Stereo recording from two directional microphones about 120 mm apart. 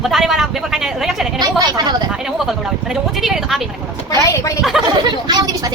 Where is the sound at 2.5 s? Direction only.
5° right (ahead or behind).